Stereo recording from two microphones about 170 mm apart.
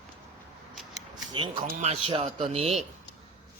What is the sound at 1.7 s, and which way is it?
Speech, 40° right (ahead or behind).